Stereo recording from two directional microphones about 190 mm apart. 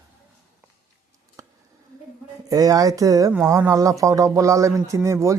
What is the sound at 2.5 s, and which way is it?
A man's voice, 20° right (ahead or behind).